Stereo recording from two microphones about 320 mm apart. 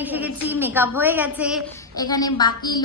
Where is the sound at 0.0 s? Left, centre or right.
Centre.